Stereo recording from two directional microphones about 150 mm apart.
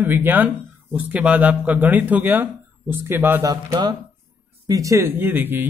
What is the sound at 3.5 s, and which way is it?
Speech, 25° right (ahead or behind).